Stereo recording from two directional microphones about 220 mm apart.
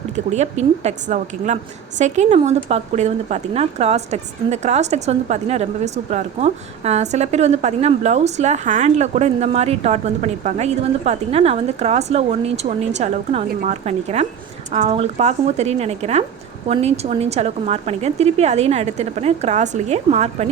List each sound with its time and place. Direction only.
0.3 s a woman's voice: 30° right (ahead or behind)